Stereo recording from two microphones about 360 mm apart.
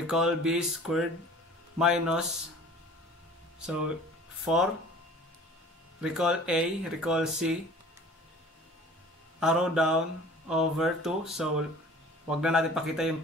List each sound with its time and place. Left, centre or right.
0.0 s speech: centre
3.6 s speech: centre
5.9 s speech: centre
9.4 s speech: centre